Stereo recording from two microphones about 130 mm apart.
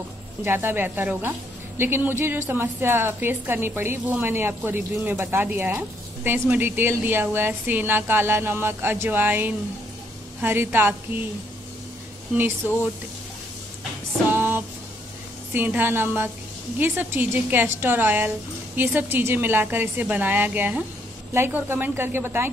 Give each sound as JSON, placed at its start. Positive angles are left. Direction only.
{"t": 0.4, "sound": "a woman's voice", "side_deg": -15}
{"t": 12.4, "sound": "a woman's voice", "side_deg": -15}
{"t": 14.3, "sound": "music", "side_deg": -15}
{"t": 15.5, "sound": "a woman's voice", "side_deg": -15}